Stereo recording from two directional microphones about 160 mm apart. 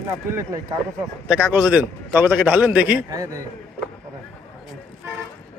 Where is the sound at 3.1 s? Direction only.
20° right (ahead or behind).